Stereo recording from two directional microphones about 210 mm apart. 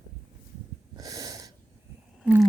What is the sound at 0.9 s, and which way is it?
Wheeze, 15° right (ahead or behind).